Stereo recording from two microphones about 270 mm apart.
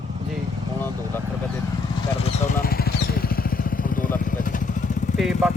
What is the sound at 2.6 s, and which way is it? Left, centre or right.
Vehicle, left.